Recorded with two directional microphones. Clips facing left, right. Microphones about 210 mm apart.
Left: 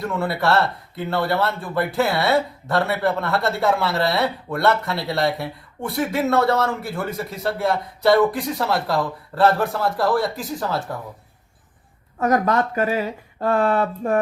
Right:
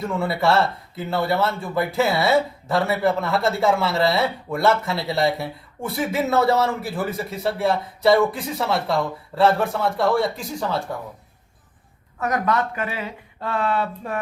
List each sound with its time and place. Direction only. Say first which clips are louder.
0.0 s speech: right 1 dB; centre (ahead or behind)
12.2 s speech: left 3 dB; 40° left (ahead or behind)